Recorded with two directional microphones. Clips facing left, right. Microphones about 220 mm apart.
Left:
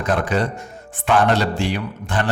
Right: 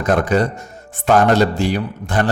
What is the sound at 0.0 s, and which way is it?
A man's voice, 45° right (ahead or behind).